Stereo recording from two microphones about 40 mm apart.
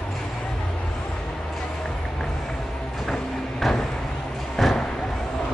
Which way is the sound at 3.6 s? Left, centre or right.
Centre.